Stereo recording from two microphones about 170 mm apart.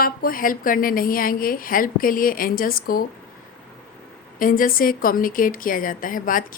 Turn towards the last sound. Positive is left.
turn(degrees=55)  # may be behind; listen again after turning